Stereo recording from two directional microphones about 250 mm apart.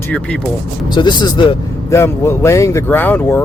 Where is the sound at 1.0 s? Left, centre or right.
Centre.